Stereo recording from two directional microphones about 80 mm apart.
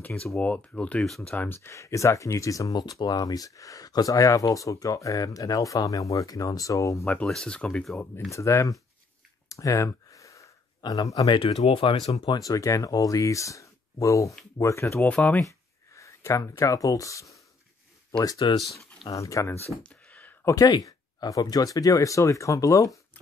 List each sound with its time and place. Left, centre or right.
0.0 s speech: centre; by 2.7 s left
2.7 s speech: left
7.2 s speech: centre
8.3 s speech: left
9.5 s a sound: left
10.8 s speech: left
11.2 s speech: left
12.4 s speech: left
19.8 s a sound: centre
20.4 s speech: left